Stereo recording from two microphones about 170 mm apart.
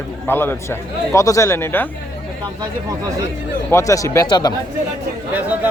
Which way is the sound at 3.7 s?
20° left (ahead or behind).